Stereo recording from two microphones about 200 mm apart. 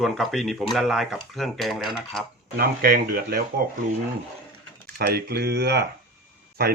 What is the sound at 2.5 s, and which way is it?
Speech, 50° right (ahead or behind).